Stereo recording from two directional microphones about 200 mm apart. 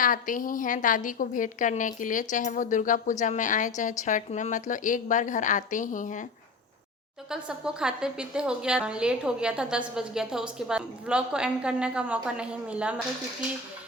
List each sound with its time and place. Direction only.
0.0 s a woman's voice: 40° left (ahead or behind)
7.3 s a woman's voice: 5° right (ahead or behind)